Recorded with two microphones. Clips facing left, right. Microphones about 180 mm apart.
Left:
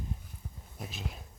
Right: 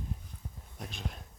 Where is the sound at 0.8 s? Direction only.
5° left (ahead or behind).